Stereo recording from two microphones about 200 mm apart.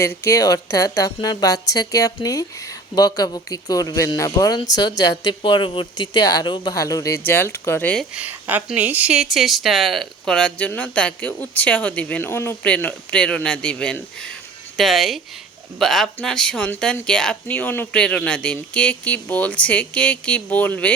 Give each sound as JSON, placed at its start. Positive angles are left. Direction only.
{"t": 0.0, "sound": "speech", "side_deg": 15}
{"t": 8.1, "sound": "speech", "side_deg": -5}